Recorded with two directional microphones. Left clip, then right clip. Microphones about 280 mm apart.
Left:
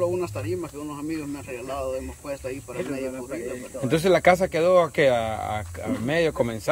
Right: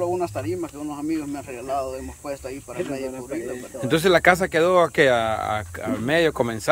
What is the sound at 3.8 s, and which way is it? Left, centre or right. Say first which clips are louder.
Speech: right 2 dB; centre.